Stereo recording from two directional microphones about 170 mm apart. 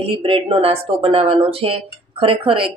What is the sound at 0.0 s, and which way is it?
A woman's voice, 35° right (ahead or behind).